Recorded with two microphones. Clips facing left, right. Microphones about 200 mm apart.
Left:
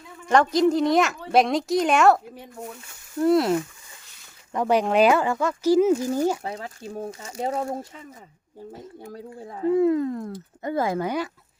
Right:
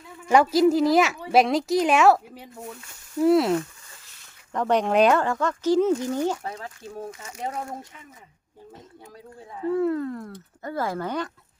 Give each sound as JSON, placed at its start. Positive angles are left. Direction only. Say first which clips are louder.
{"t": 0.3, "sound": "a woman's voice", "louder": "right 1 dB", "side_deg": -5}
{"t": 6.4, "sound": "speech", "louder": "left 2 dB", "side_deg": 30}
{"t": 9.6, "sound": "speech", "louder": "left 4 dB", "side_deg": 15}